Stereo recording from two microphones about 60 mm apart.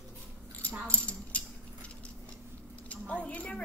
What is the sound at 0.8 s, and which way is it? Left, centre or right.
Speech, left.